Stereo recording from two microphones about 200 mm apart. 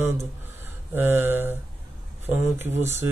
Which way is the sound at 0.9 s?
10° right (ahead or behind).